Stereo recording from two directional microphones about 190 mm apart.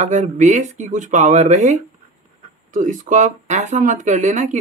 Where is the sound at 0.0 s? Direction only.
40° right (ahead or behind).